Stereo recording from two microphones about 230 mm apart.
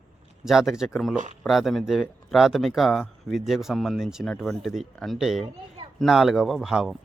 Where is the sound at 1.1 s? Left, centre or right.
Right.